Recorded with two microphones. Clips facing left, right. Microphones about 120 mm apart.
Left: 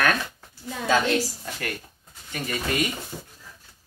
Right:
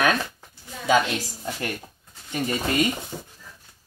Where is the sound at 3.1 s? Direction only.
20° right (ahead or behind).